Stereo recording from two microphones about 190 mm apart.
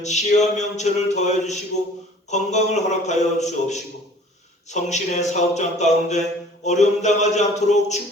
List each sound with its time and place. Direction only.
0.0 s speech: 35° left (ahead or behind)